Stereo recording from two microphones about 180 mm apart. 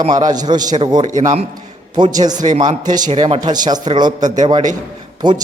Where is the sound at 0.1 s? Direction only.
20° right (ahead or behind).